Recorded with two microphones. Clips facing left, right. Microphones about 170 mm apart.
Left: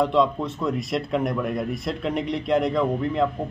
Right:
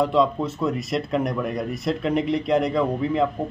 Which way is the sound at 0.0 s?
Centre (ahead or behind).